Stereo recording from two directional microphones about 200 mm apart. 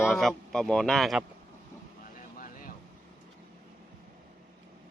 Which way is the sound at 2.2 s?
45° left (ahead or behind).